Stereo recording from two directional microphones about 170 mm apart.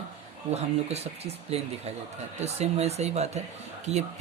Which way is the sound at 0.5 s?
40° right (ahead or behind).